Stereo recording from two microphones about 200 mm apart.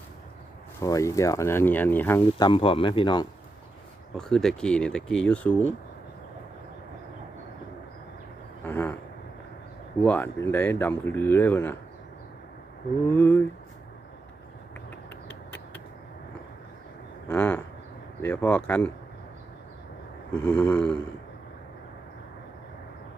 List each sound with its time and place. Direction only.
0.8 s speech: 15° left (ahead or behind)
2.5 s speech: 25° left (ahead or behind)
4.2 s speech: centre (ahead or behind)
8.6 s a sound: 10° left (ahead or behind)
10.0 s speech: 10° left (ahead or behind)
13.1 s speech: 10° left (ahead or behind)
17.2 s a sound: 10° left (ahead or behind)
18.2 s speech: 10° left (ahead or behind)
20.3 s speech: 10° left (ahead or behind)